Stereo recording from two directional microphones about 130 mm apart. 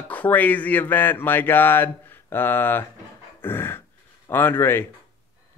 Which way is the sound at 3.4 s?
15° left (ahead or behind).